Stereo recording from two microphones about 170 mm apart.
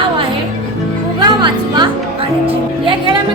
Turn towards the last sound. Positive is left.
turn(degrees=-25)  # may be behind; listen again after turning